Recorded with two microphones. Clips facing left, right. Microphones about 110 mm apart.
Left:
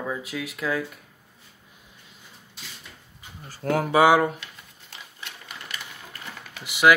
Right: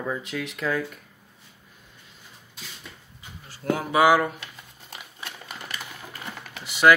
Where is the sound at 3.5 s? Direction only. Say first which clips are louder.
Left 2 dB; 45° left (ahead or behind).